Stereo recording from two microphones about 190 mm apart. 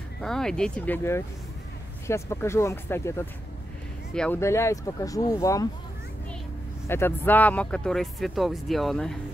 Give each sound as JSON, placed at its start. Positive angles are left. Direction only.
{"t": 0.2, "sound": "speech", "side_deg": 5}
{"t": 6.9, "sound": "speech", "side_deg": 10}